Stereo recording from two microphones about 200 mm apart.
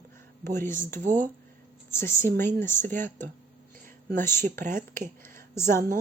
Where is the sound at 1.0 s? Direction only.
40° right (ahead or behind).